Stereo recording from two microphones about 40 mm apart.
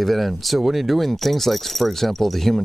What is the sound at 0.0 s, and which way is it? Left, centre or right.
Speech, centre.